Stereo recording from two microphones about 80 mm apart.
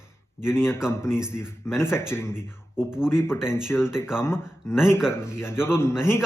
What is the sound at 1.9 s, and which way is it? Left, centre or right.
Speech, left.